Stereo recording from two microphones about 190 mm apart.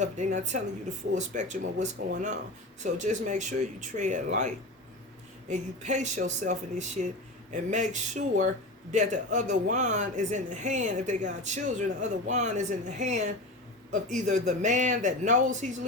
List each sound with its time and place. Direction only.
0.0 s speech: 40° right (ahead or behind)
5.5 s speech: 40° right (ahead or behind)